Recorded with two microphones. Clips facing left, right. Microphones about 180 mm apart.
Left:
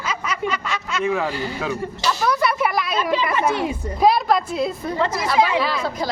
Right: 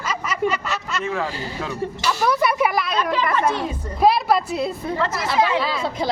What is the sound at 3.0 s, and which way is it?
Speech, 10° left (ahead or behind).